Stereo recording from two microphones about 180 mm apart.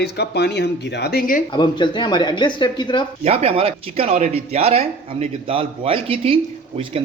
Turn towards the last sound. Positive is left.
turn(degrees=-30)  # may be behind; listen again after turning